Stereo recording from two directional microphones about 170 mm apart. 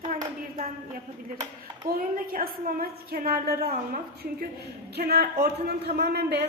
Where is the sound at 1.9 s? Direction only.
60° right (ahead or behind).